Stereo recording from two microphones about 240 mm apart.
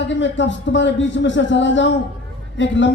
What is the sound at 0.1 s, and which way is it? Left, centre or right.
A man's voice, left.